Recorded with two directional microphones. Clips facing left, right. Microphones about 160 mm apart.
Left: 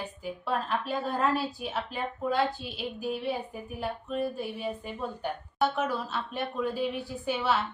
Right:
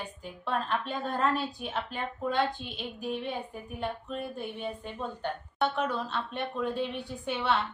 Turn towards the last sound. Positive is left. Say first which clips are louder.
# left 1 dB
turn(degrees=5)  # may be behind; listen again after turning